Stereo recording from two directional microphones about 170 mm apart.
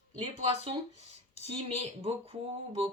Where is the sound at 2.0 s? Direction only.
35° right (ahead or behind).